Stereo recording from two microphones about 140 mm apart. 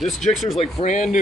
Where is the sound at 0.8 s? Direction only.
60° left (ahead or behind).